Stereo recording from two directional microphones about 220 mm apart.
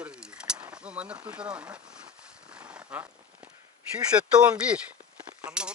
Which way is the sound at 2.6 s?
5° right (ahead or behind).